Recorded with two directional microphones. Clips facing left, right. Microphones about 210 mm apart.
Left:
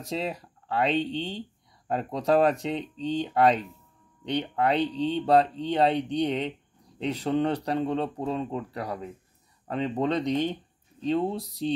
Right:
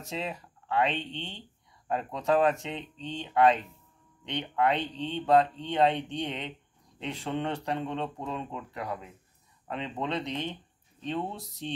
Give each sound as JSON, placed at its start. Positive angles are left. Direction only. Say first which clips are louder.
{"t": 0.1, "sound": "speech", "louder": "left 5 dB", "side_deg": 40}